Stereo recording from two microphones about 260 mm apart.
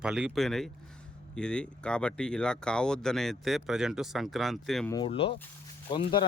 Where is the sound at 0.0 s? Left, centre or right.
Centre.